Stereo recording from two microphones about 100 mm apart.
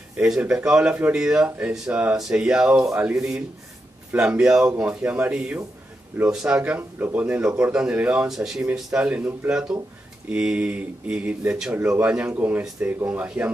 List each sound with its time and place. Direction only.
0.1 s speech: 10° right (ahead or behind)